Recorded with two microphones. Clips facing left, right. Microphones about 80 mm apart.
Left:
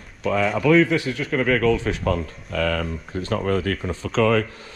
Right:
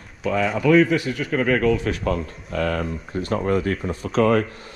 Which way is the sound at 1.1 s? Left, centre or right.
Left.